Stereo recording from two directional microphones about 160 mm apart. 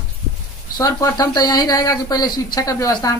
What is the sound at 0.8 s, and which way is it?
Speech, 20° left (ahead or behind).